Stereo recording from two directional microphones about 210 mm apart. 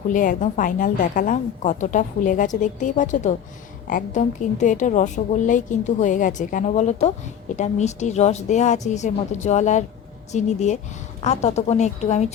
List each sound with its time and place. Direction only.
0.1 s a woman's voice: 40° left (ahead or behind)